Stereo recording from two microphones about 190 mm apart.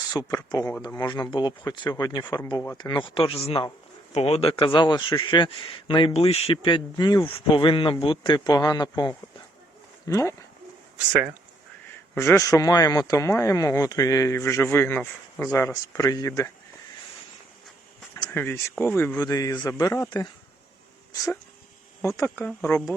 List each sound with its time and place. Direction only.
0.1 s speech: 20° left (ahead or behind)
12.1 s speech: 10° left (ahead or behind)
18.3 s speech: 10° left (ahead or behind)
22.0 s speech: 15° left (ahead or behind)